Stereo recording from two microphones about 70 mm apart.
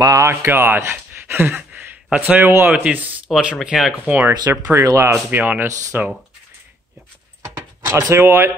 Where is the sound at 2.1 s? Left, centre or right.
Right.